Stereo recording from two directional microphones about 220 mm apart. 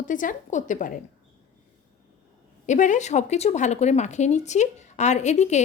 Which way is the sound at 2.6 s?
35° left (ahead or behind).